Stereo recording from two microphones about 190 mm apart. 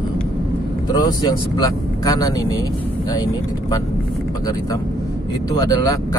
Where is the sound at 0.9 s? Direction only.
20° left (ahead or behind).